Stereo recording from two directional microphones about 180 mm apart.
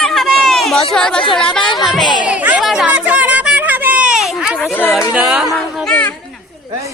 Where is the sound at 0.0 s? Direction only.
Centre (ahead or behind).